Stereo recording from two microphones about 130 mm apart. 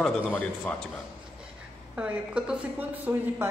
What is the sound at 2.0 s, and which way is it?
A woman's voice, 10° right (ahead or behind).